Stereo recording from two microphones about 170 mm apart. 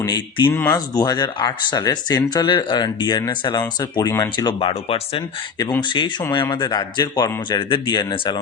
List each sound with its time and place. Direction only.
0.0 s speech: 25° left (ahead or behind)